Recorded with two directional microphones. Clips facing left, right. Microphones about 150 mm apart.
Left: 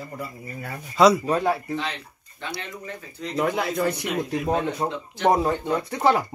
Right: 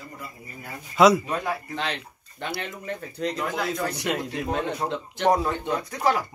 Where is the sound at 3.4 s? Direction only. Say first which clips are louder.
Left 8 dB; 70° left (ahead or behind).